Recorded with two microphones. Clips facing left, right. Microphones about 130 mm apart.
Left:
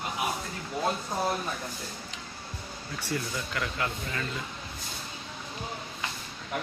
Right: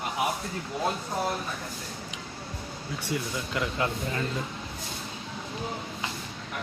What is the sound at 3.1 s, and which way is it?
Speech, 20° right (ahead or behind).